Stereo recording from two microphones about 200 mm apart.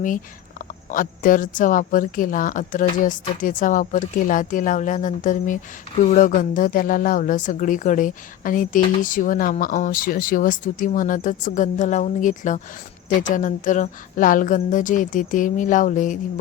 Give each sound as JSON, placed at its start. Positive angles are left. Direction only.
{"t": 0.9, "sound": "speech", "side_deg": 45}